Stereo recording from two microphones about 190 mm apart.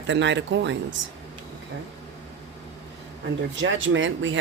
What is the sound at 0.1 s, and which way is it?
Speech, 70° right (ahead or behind).